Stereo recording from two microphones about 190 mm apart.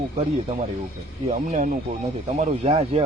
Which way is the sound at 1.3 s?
40° right (ahead or behind).